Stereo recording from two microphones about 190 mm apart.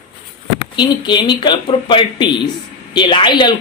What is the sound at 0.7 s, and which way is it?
Speech, 25° left (ahead or behind).